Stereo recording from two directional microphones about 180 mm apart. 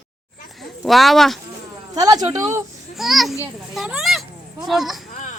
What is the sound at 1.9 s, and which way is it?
Speech, 20° right (ahead or behind).